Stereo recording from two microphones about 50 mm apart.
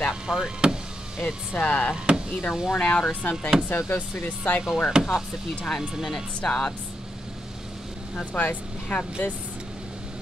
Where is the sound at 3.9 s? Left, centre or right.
Left.